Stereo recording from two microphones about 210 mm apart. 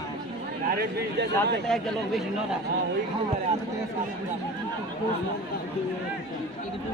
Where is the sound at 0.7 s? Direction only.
50° right (ahead or behind).